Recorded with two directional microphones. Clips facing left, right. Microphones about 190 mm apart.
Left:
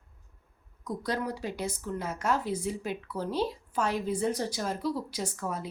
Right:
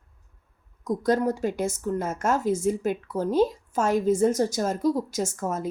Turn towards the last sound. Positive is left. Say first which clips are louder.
# right 6 dB
turn(degrees=-45)  # may be behind; listen again after turning